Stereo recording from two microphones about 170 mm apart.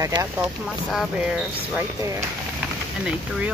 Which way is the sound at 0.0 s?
20° right (ahead or behind).